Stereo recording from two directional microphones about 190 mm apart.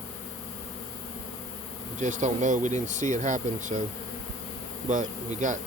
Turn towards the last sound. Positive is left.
turn(degrees=-40)  # may be behind; listen again after turning